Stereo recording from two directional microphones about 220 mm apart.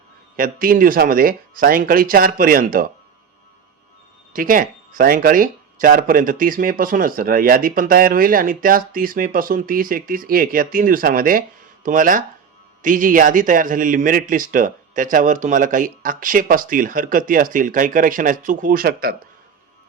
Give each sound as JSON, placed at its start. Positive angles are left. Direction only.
{"t": 0.3, "sound": "speech", "side_deg": -40}
{"t": 4.3, "sound": "speech", "side_deg": -40}